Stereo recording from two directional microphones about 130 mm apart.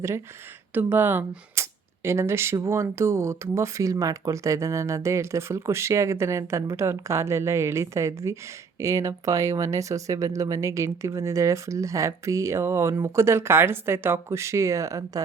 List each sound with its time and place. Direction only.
0.7 s speech: 15° right (ahead or behind)